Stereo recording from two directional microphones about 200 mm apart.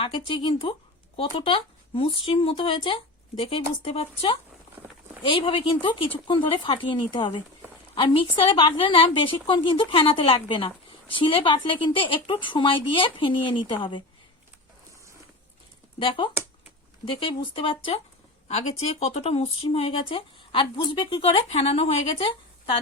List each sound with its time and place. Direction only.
0.0 s speech: 25° left (ahead or behind)
16.0 s speech: 25° left (ahead or behind)